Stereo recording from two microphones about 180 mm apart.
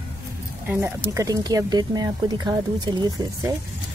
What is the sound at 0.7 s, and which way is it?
Speech, 15° right (ahead or behind).